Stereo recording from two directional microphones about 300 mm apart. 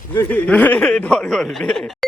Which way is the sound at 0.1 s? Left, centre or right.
Centre.